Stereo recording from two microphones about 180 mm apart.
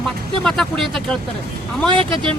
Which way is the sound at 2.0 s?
30° right (ahead or behind).